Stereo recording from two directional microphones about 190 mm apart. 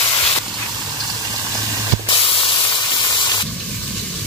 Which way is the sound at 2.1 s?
30° left (ahead or behind).